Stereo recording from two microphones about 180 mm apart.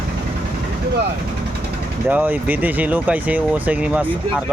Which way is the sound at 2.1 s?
10° right (ahead or behind).